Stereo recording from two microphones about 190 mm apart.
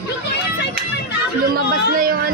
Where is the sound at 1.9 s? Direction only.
50° right (ahead or behind).